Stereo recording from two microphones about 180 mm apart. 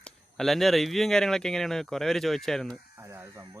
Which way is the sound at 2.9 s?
15° right (ahead or behind).